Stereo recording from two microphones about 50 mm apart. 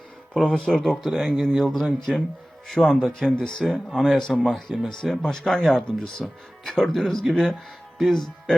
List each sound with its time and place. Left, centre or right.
0.4 s speech: left
0.7 s speech: centre
1.0 s speech: centre